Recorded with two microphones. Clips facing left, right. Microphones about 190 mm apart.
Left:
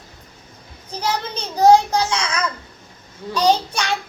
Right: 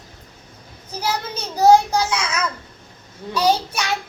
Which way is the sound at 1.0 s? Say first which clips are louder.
Left 1 dB; 10° right (ahead or behind).